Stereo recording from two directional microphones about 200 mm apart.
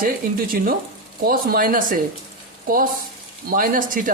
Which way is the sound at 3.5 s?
45° right (ahead or behind).